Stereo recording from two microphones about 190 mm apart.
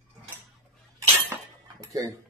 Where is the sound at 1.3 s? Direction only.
15° right (ahead or behind).